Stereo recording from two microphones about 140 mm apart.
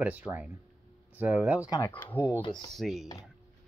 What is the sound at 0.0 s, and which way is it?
Speech, 10° right (ahead or behind).